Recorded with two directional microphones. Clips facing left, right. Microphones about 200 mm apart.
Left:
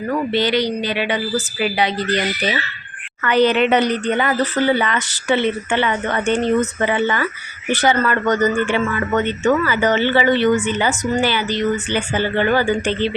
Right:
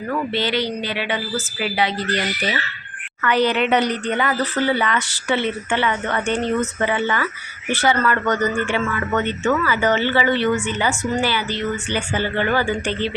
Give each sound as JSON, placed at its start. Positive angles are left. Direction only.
{"t": 0.1, "sound": "speech", "side_deg": 15}